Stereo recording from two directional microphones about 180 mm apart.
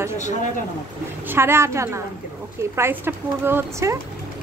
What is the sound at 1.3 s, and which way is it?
A woman's voice, 15° right (ahead or behind).